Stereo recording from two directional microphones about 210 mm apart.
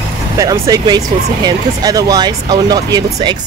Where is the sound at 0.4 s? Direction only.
15° right (ahead or behind).